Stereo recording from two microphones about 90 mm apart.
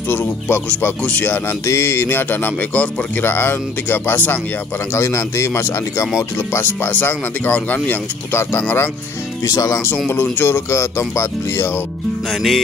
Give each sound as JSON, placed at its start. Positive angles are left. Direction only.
{"t": 0.1, "sound": "speech", "side_deg": 20}
{"t": 1.7, "sound": "speech", "side_deg": 30}
{"t": 4.9, "sound": "speech", "side_deg": 35}
{"t": 10.0, "sound": "speech", "side_deg": 20}
{"t": 12.3, "sound": "music", "side_deg": 0}